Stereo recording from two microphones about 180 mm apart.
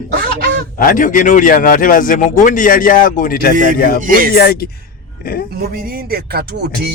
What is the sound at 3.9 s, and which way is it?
Speech, 50° right (ahead or behind).